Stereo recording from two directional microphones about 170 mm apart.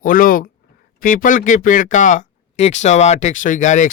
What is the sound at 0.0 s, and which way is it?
Speech, 55° left (ahead or behind).